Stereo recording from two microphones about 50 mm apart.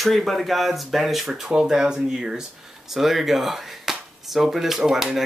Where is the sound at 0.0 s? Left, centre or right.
Centre.